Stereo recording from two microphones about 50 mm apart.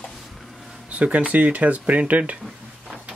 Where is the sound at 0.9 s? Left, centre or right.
Right.